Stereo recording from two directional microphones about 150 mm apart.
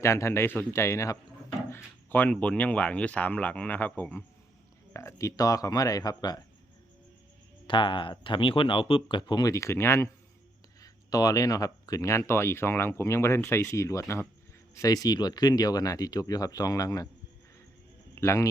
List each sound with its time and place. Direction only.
0.0 s speech: 20° left (ahead or behind)
7.7 s speech: 35° left (ahead or behind)
18.1 s a man's voice: 15° left (ahead or behind)